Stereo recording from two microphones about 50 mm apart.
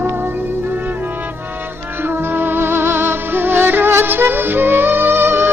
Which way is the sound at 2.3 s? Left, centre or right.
Right.